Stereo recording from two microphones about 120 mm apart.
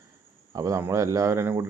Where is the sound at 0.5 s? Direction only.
30° right (ahead or behind).